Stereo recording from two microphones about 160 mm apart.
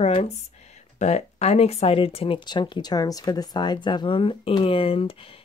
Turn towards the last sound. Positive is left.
turn(degrees=35)  # may be behind; listen again after turning